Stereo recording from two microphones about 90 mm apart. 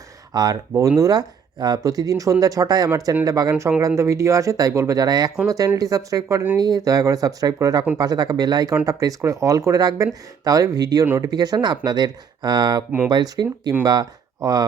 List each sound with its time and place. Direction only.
0.3 s speech: 45° right (ahead or behind)